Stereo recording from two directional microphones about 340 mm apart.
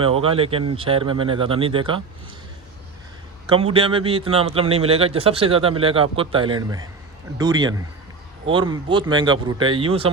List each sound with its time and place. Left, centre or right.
0.0 s a man's voice: centre
3.5 s a man's voice: centre